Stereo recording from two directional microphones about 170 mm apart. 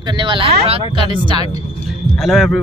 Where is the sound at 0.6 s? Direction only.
30° right (ahead or behind).